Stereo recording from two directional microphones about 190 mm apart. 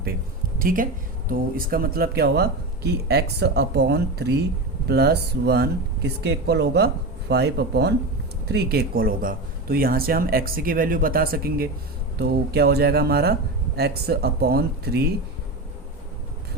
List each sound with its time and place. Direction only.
0.6 s speech: 45° right (ahead or behind)